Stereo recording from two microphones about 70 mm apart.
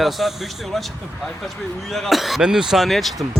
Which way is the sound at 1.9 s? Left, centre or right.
Centre.